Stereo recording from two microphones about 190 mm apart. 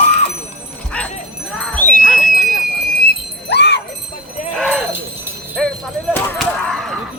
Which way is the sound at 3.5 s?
60° left (ahead or behind).